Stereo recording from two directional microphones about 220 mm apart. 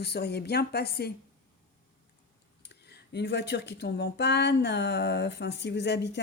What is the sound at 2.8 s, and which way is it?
Speech, 50° left (ahead or behind).